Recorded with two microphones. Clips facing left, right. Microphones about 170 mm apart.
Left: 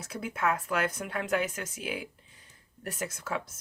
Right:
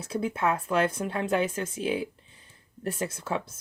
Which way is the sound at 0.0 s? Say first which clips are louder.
Right 4 dB; 30° right (ahead or behind).